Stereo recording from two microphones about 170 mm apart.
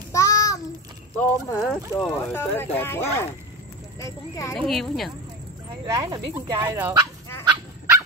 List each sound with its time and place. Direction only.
0.1 s child singing: 20° left (ahead or behind)
1.1 s speech: 15° left (ahead or behind)
4.6 s speech: centre (ahead or behind)
5.9 s speech: 20° right (ahead or behind)